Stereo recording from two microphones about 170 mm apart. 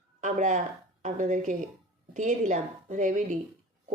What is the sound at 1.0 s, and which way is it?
Speech, 50° right (ahead or behind).